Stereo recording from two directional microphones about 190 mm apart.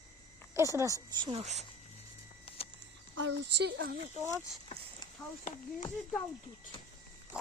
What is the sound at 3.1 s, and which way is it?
Speech, 70° right (ahead or behind).